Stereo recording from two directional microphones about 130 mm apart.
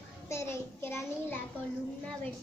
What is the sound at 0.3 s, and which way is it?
A child's voice, 20° left (ahead or behind).